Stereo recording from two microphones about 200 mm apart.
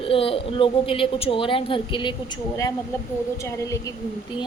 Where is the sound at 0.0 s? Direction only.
25° left (ahead or behind).